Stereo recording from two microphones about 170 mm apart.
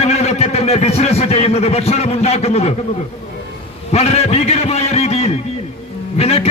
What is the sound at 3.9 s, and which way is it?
A man's voice, 40° left (ahead or behind).